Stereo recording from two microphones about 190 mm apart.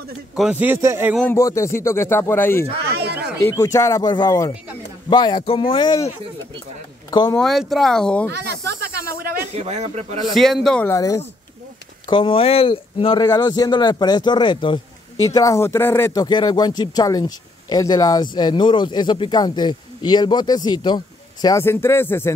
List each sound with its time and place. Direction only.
0.4 s a man's voice: 5° right (ahead or behind)
1.1 s speech: 5° left (ahead or behind)
2.9 s a sound: 60° right (ahead or behind)
3.4 s speech: 15° left (ahead or behind)
7.1 s speech: 20° left (ahead or behind)
7.3 s speech: centre (ahead or behind)
8.3 s snake: 60° right (ahead or behind)
9.6 s speech: 35° right (ahead or behind)
10.3 s speech: centre (ahead or behind)
10.9 s speech: 15° left (ahead or behind)
12.1 s speech: 30° left (ahead or behind); by 22.3 s 10° left (ahead or behind)